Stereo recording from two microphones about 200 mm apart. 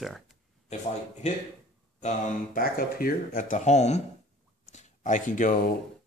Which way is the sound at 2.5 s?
45° left (ahead or behind).